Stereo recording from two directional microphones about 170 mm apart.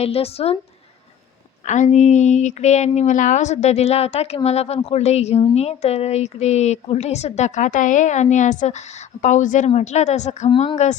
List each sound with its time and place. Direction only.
0.0 s a woman's voice: 35° left (ahead or behind)
1.6 s a woman's voice: 45° left (ahead or behind)